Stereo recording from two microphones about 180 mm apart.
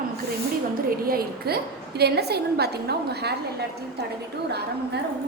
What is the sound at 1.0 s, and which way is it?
A woman's voice, 55° right (ahead or behind).